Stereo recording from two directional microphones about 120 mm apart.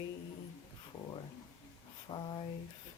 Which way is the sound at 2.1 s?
35° left (ahead or behind).